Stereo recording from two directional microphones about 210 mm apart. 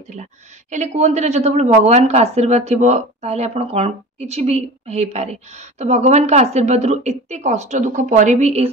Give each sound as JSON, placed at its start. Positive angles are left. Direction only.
{"t": 0.1, "sound": "a woman's voice", "side_deg": -35}